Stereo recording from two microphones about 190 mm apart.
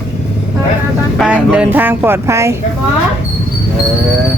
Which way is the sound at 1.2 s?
5° right (ahead or behind).